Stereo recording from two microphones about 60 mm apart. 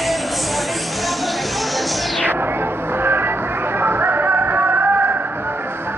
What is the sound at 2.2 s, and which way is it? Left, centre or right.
Music, right.